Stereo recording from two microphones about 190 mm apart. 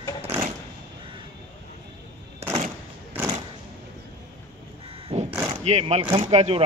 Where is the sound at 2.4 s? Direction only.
35° right (ahead or behind).